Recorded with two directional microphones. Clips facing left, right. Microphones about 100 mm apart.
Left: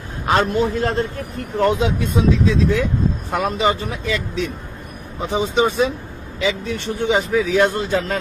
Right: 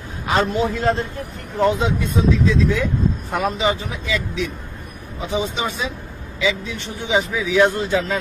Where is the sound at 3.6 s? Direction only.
55° left (ahead or behind).